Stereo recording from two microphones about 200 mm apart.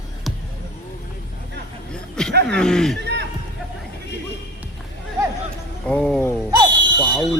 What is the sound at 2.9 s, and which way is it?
Music, 55° right (ahead or behind).